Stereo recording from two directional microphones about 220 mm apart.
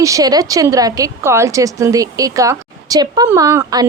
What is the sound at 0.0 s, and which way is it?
A woman's voice, 15° right (ahead or behind).